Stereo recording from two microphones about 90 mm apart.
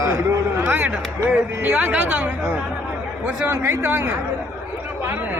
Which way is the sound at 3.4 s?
25° right (ahead or behind).